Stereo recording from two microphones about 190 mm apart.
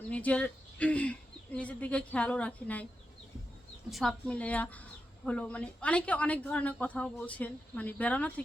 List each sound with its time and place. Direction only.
0.1 s a woman's voice: 5° left (ahead or behind)
3.8 s a woman's voice: centre (ahead or behind)